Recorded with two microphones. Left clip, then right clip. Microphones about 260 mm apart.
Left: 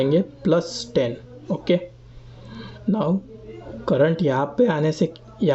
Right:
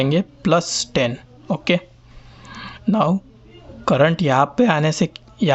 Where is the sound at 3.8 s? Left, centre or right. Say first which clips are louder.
Right 3 dB; right.